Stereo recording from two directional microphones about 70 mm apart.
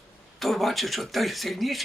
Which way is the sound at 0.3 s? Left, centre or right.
Centre.